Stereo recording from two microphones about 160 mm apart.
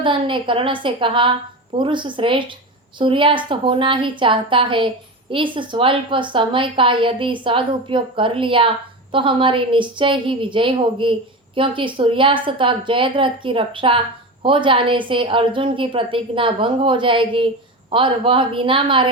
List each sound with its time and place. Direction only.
0.0 s a woman's voice: 30° right (ahead or behind)